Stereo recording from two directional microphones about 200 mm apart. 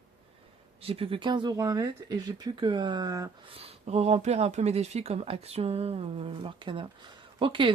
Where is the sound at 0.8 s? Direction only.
30° right (ahead or behind).